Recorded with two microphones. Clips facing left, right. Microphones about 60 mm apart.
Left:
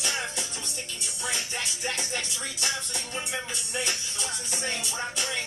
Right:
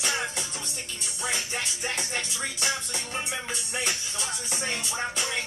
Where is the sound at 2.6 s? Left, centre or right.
Centre.